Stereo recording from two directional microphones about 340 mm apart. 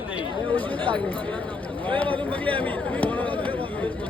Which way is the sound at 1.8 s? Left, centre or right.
Centre.